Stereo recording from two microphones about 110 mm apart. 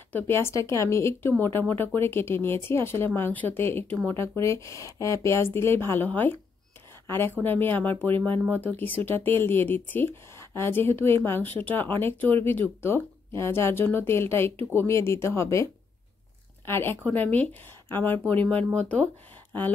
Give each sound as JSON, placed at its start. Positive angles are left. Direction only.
{"t": 0.1, "sound": "speech", "side_deg": 20}